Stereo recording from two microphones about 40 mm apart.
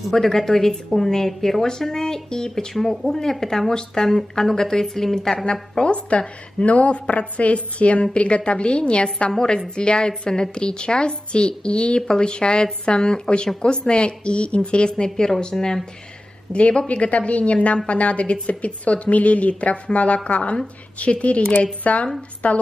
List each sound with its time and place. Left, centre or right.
0.1 s speech: centre; by 9.3 s left
9.3 s a woman's voice: centre
16.5 s a woman's voice: left